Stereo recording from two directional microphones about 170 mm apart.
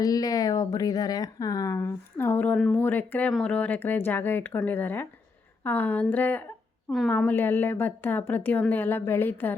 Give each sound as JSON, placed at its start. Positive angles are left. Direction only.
{"t": 0.0, "sound": "speech", "side_deg": 20}